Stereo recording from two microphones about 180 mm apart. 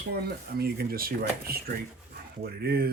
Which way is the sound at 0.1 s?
60° right (ahead or behind).